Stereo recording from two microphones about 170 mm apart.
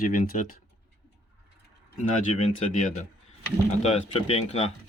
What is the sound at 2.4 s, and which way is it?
Speech, 45° left (ahead or behind).